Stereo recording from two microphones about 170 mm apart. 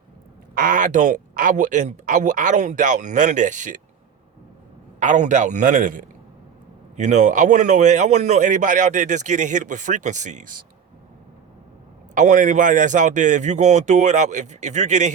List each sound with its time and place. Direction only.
0.5 s a man's voice: 50° right (ahead or behind)
4.9 s a man's voice: 45° right (ahead or behind)
12.1 s a man's voice: 45° right (ahead or behind)